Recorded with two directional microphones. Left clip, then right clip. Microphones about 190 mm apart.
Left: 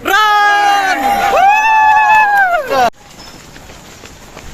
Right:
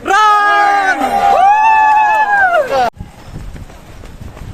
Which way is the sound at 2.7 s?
20° left (ahead or behind).